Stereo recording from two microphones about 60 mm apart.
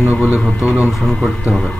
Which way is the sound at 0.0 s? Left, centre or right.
Right.